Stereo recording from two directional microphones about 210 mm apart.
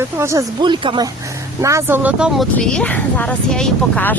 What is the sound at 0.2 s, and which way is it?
Speech, 15° right (ahead or behind).